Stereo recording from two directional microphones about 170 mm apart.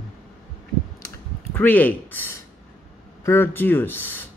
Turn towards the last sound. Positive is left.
turn(degrees=10)  # may be behind; listen again after turning